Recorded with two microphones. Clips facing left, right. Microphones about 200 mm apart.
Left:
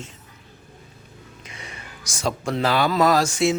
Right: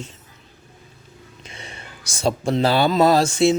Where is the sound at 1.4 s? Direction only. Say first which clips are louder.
Right 2 dB; 30° right (ahead or behind).